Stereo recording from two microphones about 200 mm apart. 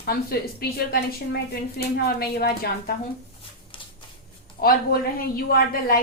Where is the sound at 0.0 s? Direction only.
50° left (ahead or behind).